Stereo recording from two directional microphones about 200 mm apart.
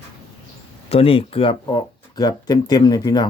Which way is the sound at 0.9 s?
30° left (ahead or behind).